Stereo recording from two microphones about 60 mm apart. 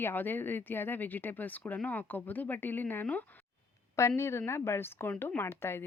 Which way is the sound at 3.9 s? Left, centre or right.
Left.